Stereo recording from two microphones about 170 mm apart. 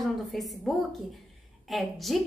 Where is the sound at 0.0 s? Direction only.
Centre (ahead or behind).